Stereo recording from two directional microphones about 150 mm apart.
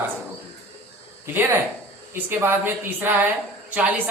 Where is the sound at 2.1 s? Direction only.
15° right (ahead or behind).